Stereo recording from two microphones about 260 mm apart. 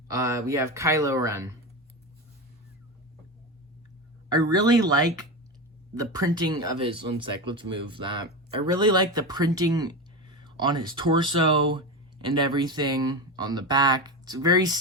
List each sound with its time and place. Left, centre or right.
0.1 s speech: centre
4.3 s speech: centre